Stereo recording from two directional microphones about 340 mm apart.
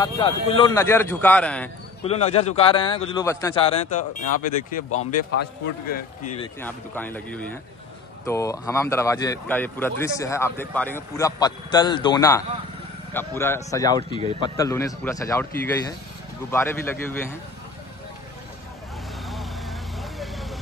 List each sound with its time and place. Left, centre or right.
0.0 s a man's voice: centre
2.0 s a man's voice: centre
6.6 s a man's voice: centre
16.4 s a man's voice: centre
20.0 s vehicle: centre